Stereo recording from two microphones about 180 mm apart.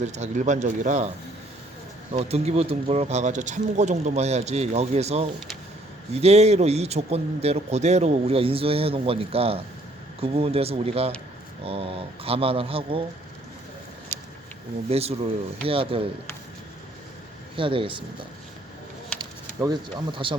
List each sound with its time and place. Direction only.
0.0 s speech: 40° right (ahead or behind)
2.1 s speech: 35° right (ahead or behind)
14.1 s a sound: 10° left (ahead or behind)
14.8 s speech: 35° right (ahead or behind)
17.6 s speech: 30° right (ahead or behind)
19.2 s speech: 25° right (ahead or behind)